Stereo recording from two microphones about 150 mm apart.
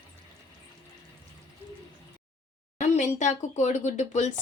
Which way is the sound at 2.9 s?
50° left (ahead or behind).